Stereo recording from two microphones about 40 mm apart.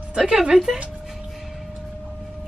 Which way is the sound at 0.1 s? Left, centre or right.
Centre.